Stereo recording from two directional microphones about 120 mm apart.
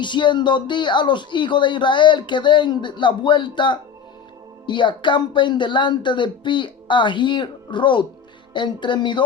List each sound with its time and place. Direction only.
0.0 s speech: 40° left (ahead or behind)